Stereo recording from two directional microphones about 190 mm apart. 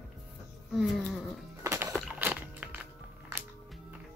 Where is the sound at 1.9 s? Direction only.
5° right (ahead or behind).